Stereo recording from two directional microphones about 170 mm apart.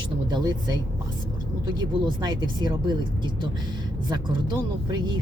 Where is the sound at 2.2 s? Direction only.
25° right (ahead or behind).